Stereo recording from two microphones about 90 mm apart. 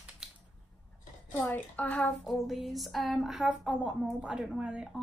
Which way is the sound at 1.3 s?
15° left (ahead or behind).